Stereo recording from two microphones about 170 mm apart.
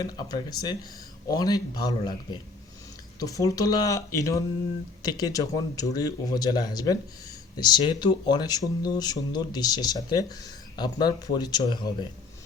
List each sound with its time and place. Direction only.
0.0 s speech: 25° left (ahead or behind)